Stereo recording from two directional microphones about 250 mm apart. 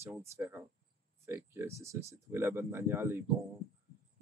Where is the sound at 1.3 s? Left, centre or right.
Centre.